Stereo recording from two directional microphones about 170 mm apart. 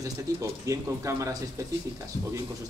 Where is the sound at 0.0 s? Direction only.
20° right (ahead or behind).